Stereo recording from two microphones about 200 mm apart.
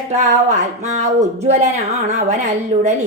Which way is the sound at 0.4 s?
35° right (ahead or behind).